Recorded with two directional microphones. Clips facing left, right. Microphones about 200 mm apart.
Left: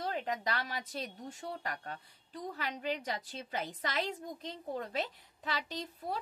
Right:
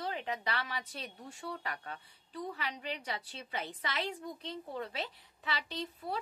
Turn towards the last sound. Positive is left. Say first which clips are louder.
# even
turn(degrees=45)  # may be behind; listen again after turning